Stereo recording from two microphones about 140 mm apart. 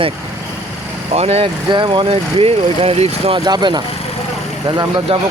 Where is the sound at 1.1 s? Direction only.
50° right (ahead or behind).